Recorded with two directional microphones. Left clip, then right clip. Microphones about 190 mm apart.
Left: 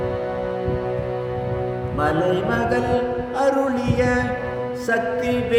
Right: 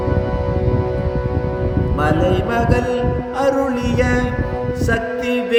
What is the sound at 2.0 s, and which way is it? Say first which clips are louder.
Music: right 2 dB; 25° right (ahead or behind).